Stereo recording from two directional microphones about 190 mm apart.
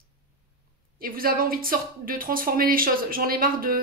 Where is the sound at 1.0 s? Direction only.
50° right (ahead or behind).